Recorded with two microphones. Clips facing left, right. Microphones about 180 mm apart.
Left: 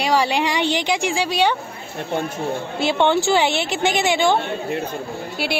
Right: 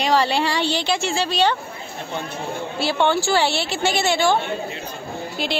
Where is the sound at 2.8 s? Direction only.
20° left (ahead or behind).